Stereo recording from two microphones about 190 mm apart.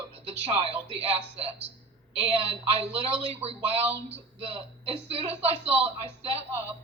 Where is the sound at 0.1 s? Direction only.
30° right (ahead or behind).